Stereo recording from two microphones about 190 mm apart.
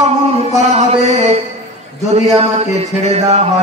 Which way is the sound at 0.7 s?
35° right (ahead or behind).